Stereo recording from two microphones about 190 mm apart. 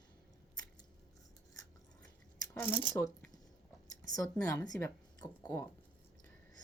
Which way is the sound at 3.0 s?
10° left (ahead or behind).